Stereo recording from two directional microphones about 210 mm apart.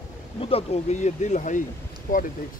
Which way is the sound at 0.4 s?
25° left (ahead or behind).